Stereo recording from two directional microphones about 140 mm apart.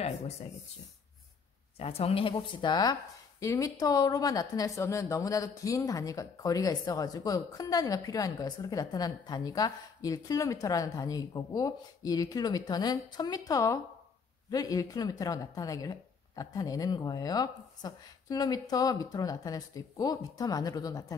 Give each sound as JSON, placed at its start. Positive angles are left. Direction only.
{"t": 1.8, "sound": "speech", "side_deg": 45}